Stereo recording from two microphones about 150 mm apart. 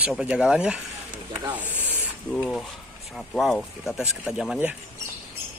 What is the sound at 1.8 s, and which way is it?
Spray, 10° right (ahead or behind).